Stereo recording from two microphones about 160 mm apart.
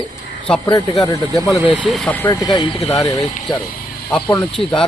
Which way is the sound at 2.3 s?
25° left (ahead or behind).